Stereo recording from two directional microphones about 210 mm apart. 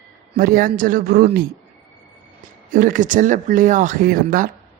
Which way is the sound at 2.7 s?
40° right (ahead or behind).